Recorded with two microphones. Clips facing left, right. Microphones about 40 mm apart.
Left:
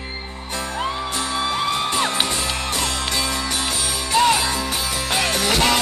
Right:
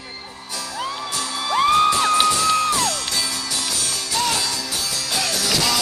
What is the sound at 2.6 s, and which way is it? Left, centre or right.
Music, left.